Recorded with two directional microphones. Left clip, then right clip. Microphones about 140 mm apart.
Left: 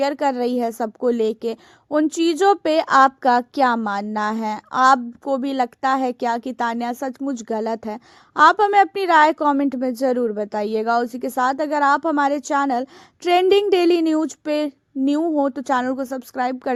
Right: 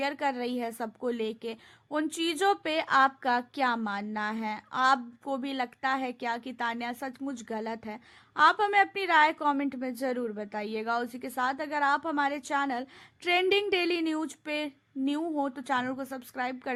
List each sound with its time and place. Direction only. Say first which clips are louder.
0.0 s a woman's voice: left 10 dB; 45° left (ahead or behind)